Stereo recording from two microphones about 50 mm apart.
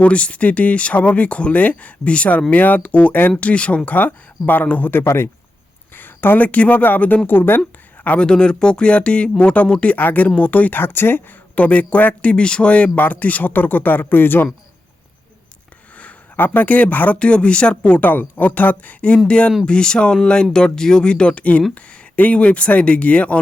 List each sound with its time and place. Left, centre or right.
0.0 s speech: left
3.8 s speech: left
5.9 s a woman's voice: left
8.2 s speech: centre
9.9 s speech: left
11.5 s speech: left
16.0 s a sound: left
16.4 s speech: left
17.2 s speech: left
18.0 s speech: left